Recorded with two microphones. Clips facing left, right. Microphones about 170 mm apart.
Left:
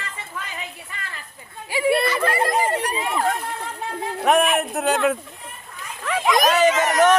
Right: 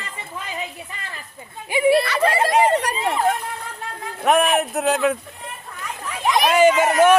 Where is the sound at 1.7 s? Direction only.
20° right (ahead or behind).